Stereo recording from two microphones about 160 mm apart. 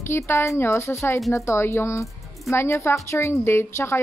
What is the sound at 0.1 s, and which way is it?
A woman's voice, 15° left (ahead or behind).